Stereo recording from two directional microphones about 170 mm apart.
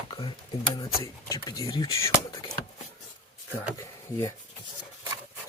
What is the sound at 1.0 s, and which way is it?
Speech, 20° left (ahead or behind).